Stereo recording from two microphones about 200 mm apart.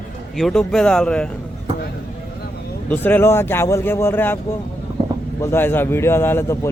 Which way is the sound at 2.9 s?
10° left (ahead or behind).